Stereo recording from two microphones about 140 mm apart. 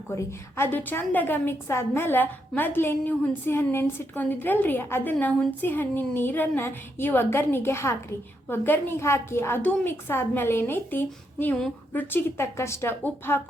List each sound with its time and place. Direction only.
0.1 s a woman's voice: 20° left (ahead or behind)
12.1 s a woman's voice: 20° left (ahead or behind)